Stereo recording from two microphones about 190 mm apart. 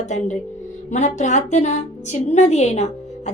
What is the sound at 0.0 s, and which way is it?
Speech, 40° left (ahead or behind).